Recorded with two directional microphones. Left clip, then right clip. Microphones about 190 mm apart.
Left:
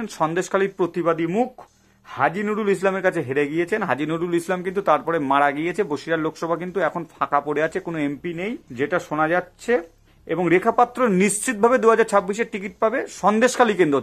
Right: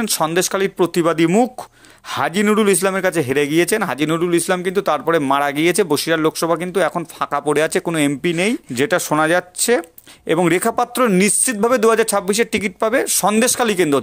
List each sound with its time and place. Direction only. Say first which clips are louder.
0.0 s speech: right 5 dB; 30° right (ahead or behind)
1.0 s speech: right 5 dB; 45° right (ahead or behind)
8.2 s speech: right 10 dB; 55° right (ahead or behind); by 14.0 s 30° right (ahead or behind)